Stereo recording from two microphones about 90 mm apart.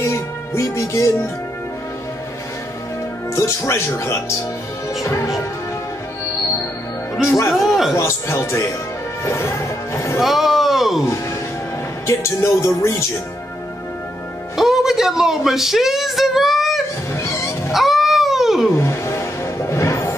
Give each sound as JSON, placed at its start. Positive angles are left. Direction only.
{"t": 0.0, "sound": "music", "side_deg": 30}
{"t": 3.3, "sound": "music", "side_deg": 30}
{"t": 7.2, "sound": "music", "side_deg": 30}
{"t": 7.5, "sound": "a sound", "side_deg": -5}
{"t": 7.9, "sound": "music", "side_deg": 30}
{"t": 9.2, "sound": "speech", "side_deg": 30}
{"t": 10.2, "sound": "music", "side_deg": 0}
{"t": 12.1, "sound": "music", "side_deg": 30}
{"t": 14.6, "sound": "a sound", "side_deg": -5}
{"t": 17.1, "sound": "dog", "side_deg": 30}
{"t": 17.7, "sound": "a sound", "side_deg": 0}
{"t": 18.8, "sound": "music", "side_deg": 30}